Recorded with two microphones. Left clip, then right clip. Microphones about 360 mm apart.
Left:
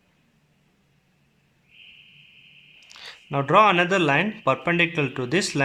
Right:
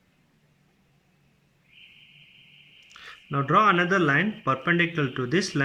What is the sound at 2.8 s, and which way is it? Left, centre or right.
Speech, centre.